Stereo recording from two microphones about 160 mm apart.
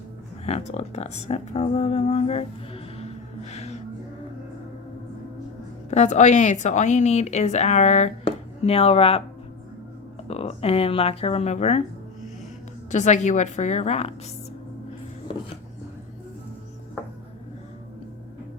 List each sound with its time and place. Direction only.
0.4 s speech: 40° left (ahead or behind)
5.9 s a woman's voice: 45° left (ahead or behind)
10.2 s speech: 40° left (ahead or behind)
12.9 s a woman's voice: 50° left (ahead or behind)